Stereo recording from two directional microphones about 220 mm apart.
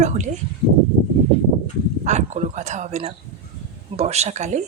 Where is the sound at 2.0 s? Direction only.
30° right (ahead or behind).